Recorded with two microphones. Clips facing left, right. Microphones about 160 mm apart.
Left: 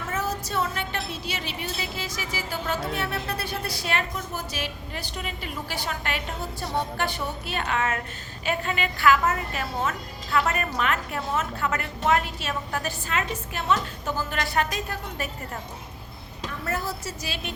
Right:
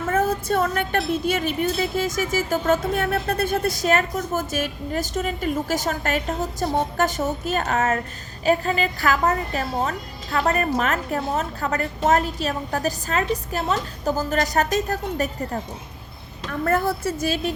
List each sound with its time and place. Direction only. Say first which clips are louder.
0.1 s a woman's voice: right 8 dB; 55° right (ahead or behind)
16.5 s a woman's voice: right 9 dB; 55° right (ahead or behind)